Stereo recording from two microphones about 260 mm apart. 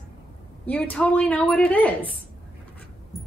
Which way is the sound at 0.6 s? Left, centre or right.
Centre.